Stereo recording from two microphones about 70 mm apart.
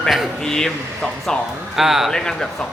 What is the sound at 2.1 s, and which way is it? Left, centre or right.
Speech, centre.